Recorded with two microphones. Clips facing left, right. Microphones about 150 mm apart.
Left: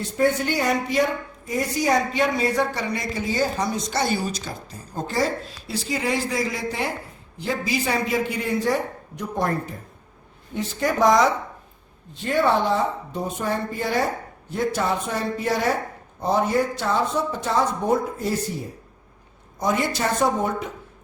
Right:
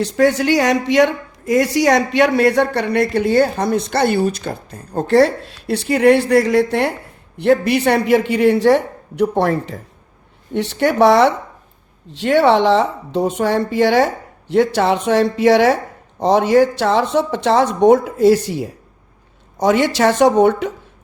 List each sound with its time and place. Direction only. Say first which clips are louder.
0.0 s a woman's voice: right 7 dB; 85° right
10.5 s a woman's voice: right 7 dB; 75° right (ahead or behind)
12.1 s a woman's voice: right 8 dB; 85° right